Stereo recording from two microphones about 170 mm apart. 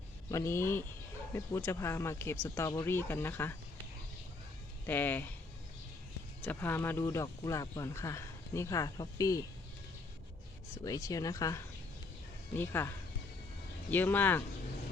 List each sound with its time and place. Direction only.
0.3 s speech: 15° left (ahead or behind)
4.9 s speech: 10° left (ahead or behind)
6.4 s speech: 10° left (ahead or behind)
10.8 s speech: 20° left (ahead or behind)
13.9 s speech: 10° left (ahead or behind)